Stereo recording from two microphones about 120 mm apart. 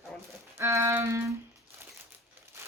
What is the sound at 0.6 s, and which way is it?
Music, 25° right (ahead or behind).